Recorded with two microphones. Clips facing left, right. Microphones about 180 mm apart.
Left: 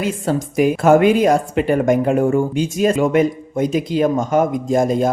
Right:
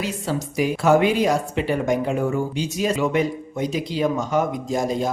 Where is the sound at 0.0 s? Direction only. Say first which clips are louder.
Left 6 dB; 50° left (ahead or behind).